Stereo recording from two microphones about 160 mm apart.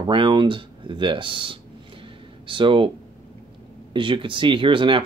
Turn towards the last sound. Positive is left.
turn(degrees=-30)  # may be behind; listen again after turning